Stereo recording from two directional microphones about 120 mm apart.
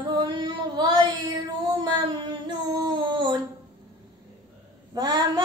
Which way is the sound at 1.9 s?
40° right (ahead or behind).